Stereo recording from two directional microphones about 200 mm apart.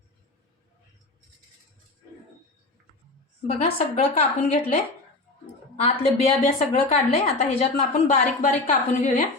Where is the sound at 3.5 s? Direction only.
35° left (ahead or behind).